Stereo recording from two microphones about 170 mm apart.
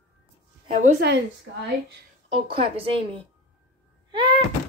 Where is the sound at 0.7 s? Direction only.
45° right (ahead or behind).